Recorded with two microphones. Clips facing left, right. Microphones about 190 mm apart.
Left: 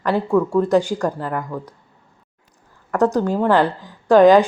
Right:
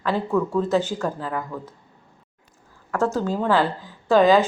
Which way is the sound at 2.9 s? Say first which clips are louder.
Left 5 dB; 15° left (ahead or behind).